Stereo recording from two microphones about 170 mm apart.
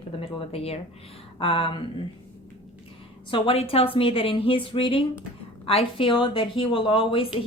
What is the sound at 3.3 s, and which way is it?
A woman's voice, 35° left (ahead or behind).